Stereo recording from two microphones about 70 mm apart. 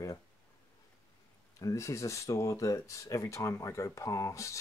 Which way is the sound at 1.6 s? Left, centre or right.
Left.